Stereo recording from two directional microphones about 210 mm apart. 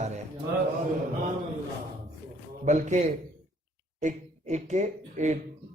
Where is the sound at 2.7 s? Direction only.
35° right (ahead or behind).